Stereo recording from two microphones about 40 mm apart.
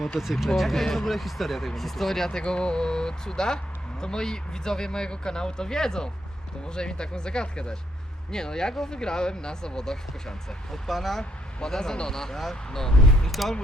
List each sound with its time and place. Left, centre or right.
0.2 s speech: centre
2.4 s speech: left; by 11.2 s centre
11.2 s speech: centre